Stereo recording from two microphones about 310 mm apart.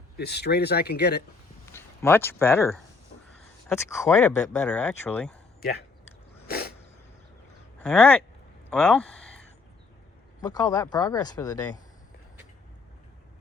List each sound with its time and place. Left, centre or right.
0.2 s speech: left
1.7 s speech: centre
6.5 s a sound: left
7.8 s speech: centre
10.4 s speech: centre